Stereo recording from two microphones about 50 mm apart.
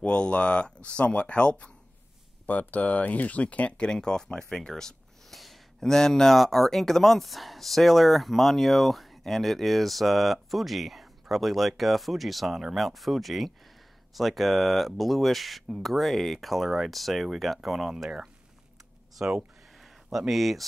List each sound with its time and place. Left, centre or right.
0.0 s speech: left
2.4 s speech: left; by 17.9 s centre
19.1 s a sound: centre